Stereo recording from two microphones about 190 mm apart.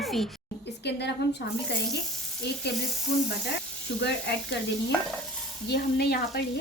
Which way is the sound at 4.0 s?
60° left (ahead or behind).